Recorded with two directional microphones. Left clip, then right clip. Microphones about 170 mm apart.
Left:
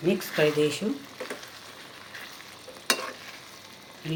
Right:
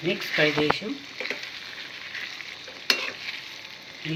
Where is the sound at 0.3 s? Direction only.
30° left (ahead or behind).